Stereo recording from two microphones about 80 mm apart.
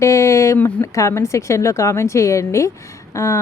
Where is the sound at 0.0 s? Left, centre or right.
Left.